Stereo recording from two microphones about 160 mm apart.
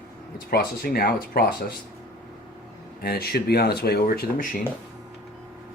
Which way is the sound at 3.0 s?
80° left.